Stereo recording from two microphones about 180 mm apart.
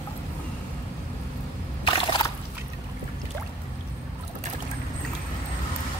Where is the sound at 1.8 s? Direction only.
25° left (ahead or behind).